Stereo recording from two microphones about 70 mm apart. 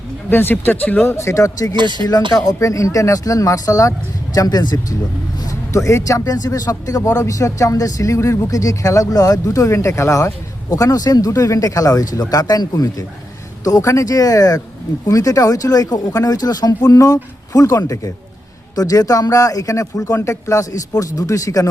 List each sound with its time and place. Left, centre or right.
0.3 s speech: left
1.0 s a man's voice: left
1.7 s speech: right
2.0 s speech: left
4.4 s speech: left
5.5 s a man's voice: left